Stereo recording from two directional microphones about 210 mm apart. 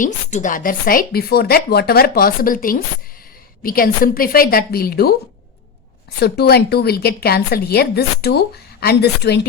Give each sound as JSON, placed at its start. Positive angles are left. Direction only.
{"t": 0.0, "sound": "a woman's voice", "side_deg": 35}
{"t": 6.1, "sound": "a woman's voice", "side_deg": 50}